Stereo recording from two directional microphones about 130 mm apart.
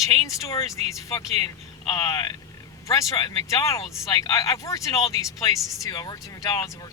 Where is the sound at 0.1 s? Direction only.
25° left (ahead or behind).